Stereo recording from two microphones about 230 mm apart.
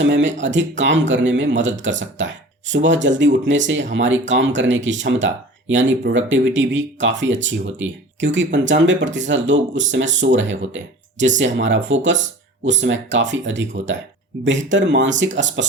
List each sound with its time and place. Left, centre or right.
0.0 s speech: right